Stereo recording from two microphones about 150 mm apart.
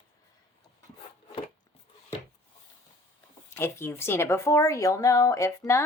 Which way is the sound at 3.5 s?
15° left (ahead or behind).